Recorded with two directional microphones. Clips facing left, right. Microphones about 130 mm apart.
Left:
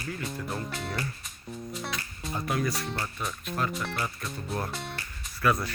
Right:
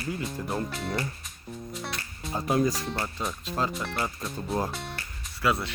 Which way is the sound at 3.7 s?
Centre (ahead or behind).